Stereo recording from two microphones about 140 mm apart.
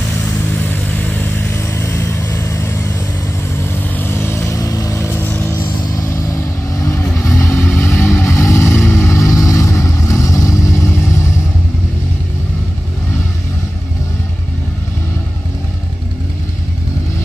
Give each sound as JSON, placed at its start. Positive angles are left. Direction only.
{"t": 0.7, "sound": "vehicle", "side_deg": 10}